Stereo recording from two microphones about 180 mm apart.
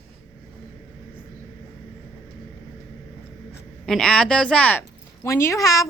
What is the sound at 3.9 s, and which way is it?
A woman's voice, 5° left (ahead or behind).